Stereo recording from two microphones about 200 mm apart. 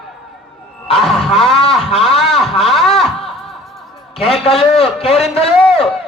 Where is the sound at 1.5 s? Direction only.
30° left (ahead or behind).